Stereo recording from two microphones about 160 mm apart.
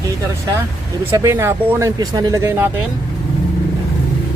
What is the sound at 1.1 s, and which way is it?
Speech, 15° right (ahead or behind).